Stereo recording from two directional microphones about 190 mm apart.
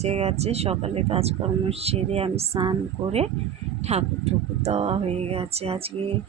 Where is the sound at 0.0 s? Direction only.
35° right (ahead or behind).